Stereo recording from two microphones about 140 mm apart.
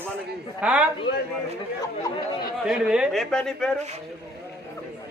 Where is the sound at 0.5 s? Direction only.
5° right (ahead or behind).